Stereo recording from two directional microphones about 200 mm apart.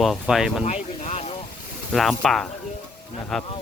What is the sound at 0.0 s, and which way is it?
Speech, centre (ahead or behind).